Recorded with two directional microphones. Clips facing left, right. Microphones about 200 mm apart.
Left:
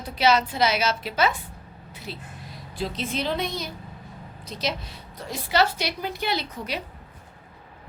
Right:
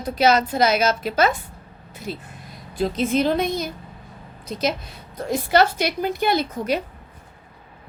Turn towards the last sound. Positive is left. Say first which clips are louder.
# right 7 dB
turn(degrees=-50)  # may be behind; listen again after turning